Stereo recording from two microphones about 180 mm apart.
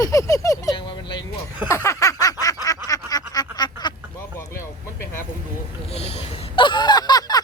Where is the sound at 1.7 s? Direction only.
15° left (ahead or behind).